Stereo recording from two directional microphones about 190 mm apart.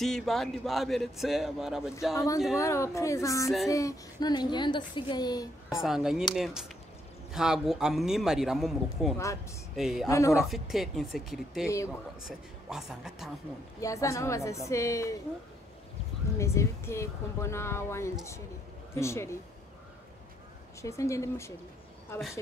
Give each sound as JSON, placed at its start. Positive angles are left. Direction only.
{"t": 0.0, "sound": "speech", "side_deg": 0}
{"t": 2.1, "sound": "a woman's voice", "side_deg": 15}
{"t": 5.7, "sound": "speech", "side_deg": -5}
{"t": 10.0, "sound": "a woman's voice", "side_deg": 15}
{"t": 10.3, "sound": "speech", "side_deg": 0}
{"t": 13.7, "sound": "a woman's voice", "side_deg": 15}
{"t": 16.3, "sound": "a woman's voice", "side_deg": 15}
{"t": 20.8, "sound": "a woman's voice", "side_deg": 15}